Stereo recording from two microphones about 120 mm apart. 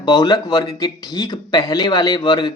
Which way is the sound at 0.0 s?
35° left (ahead or behind).